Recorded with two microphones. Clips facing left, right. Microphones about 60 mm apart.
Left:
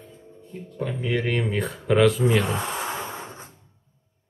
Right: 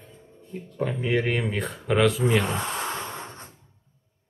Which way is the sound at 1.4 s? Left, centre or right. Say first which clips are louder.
Left 3 dB; centre.